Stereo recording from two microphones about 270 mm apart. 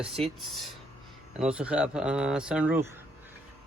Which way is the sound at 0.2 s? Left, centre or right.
Centre.